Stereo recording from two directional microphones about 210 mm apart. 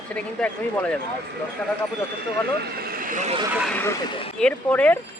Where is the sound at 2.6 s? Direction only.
45° right (ahead or behind).